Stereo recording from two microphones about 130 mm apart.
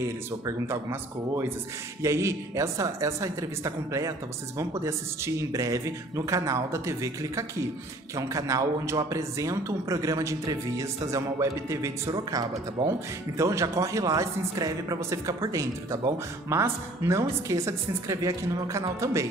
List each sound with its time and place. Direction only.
0.0 s speech: 20° right (ahead or behind)